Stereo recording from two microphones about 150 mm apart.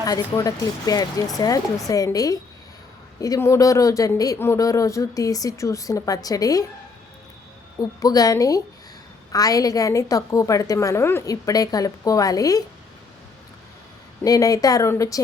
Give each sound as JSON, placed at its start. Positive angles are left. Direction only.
{"t": 0.0, "sound": "speech", "side_deg": 25}
{"t": 7.8, "sound": "speech", "side_deg": 25}
{"t": 14.2, "sound": "speech", "side_deg": 25}